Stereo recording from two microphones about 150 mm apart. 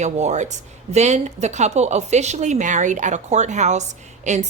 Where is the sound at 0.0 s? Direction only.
50° right (ahead or behind).